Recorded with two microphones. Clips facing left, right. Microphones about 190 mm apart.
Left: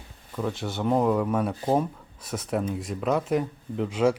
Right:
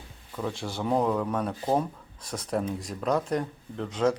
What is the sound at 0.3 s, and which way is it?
Speech, centre (ahead or behind).